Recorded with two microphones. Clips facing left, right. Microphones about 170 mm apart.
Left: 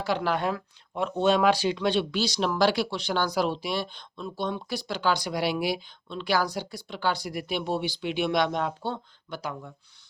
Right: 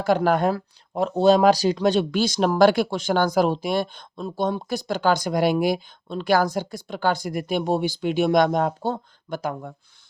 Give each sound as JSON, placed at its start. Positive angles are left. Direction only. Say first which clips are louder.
{"t": 0.0, "sound": "speech", "louder": "right 7 dB", "side_deg": -45}